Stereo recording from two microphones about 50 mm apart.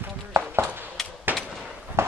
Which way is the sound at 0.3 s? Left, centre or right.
Right.